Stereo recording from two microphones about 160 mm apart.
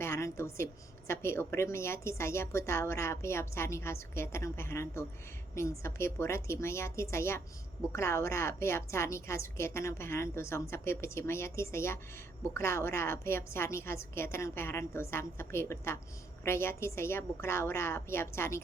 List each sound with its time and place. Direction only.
0.0 s a woman's voice: 15° left (ahead or behind)